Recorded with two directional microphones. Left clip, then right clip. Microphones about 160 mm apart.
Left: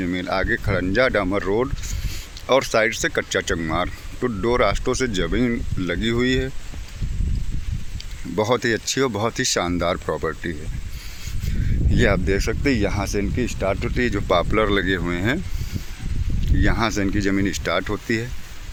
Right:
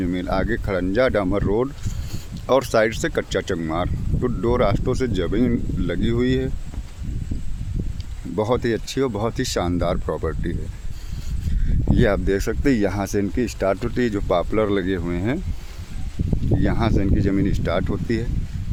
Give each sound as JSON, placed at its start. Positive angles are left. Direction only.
{"t": 0.0, "sound": "speech", "side_deg": -15}
{"t": 2.5, "sound": "speech", "side_deg": -25}
{"t": 8.4, "sound": "speech", "side_deg": -10}
{"t": 11.9, "sound": "speech", "side_deg": -20}
{"t": 14.2, "sound": "speech", "side_deg": -10}
{"t": 16.6, "sound": "speech", "side_deg": -5}